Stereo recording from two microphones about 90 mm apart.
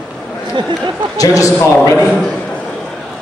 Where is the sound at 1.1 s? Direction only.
40° left (ahead or behind).